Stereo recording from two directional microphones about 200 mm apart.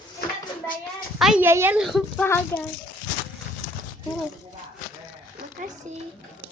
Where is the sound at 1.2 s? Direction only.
5° right (ahead or behind).